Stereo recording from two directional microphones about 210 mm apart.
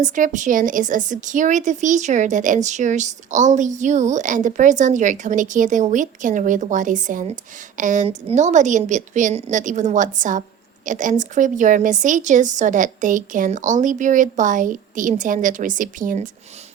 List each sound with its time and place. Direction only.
0.0 s speech: 35° right (ahead or behind)